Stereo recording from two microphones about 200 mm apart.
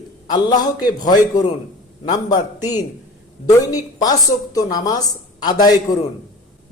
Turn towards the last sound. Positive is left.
turn(degrees=20)  # may be behind; listen again after turning